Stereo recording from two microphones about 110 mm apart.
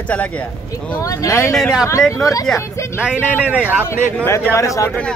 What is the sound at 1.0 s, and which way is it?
Speech, 30° left (ahead or behind).